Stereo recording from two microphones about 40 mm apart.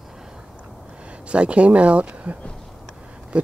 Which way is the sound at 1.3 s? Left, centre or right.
Right.